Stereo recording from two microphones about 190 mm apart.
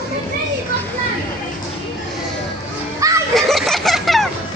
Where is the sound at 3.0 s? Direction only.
15° right (ahead or behind).